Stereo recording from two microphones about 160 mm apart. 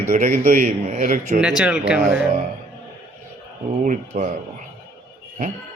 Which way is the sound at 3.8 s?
50° right (ahead or behind).